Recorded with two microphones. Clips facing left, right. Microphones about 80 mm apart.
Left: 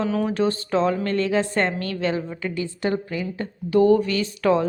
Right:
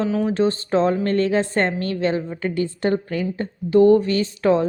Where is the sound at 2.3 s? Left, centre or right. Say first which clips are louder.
Right 4 dB; right.